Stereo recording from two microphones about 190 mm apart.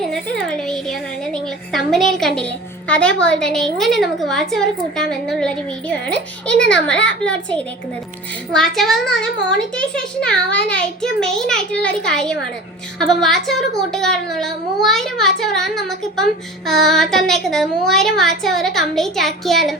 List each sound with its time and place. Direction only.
0.0 s a woman's voice: 5° left (ahead or behind)
6.5 s a child's voice: 5° left (ahead or behind)
8.5 s a child's voice: centre (ahead or behind)